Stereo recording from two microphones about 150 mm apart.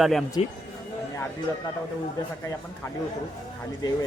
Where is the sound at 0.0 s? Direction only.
Centre (ahead or behind).